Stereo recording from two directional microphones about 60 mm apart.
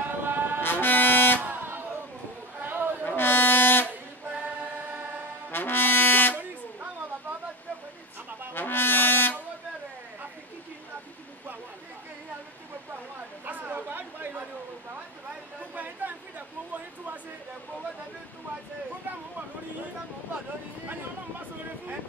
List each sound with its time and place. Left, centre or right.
0.0 s chant: right
0.6 s vehicle: left
1.4 s vehicle: right
2.6 s chatter: right
3.2 s a sound: left
4.3 s choir: right
5.5 s brass instrument: left
8.5 s brass instrument: left
13.5 s a sound: right
15.7 s a sound: right